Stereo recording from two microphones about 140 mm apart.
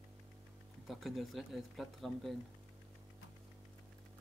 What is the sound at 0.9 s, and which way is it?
Speech, centre (ahead or behind).